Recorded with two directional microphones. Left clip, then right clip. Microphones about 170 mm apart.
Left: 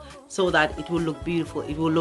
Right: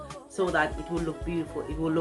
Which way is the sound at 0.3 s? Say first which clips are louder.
Left 5 dB; 60° left (ahead or behind).